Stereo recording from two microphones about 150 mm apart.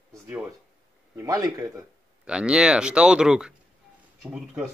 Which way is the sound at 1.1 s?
20° right (ahead or behind).